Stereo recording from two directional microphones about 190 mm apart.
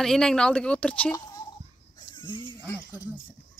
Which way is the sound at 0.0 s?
Centre (ahead or behind).